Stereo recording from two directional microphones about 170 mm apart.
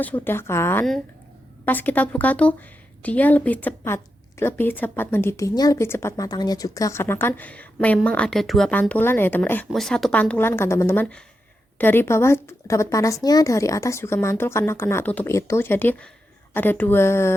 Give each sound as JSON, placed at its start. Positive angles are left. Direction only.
{"t": 0.0, "sound": "a woman's voice", "side_deg": 10}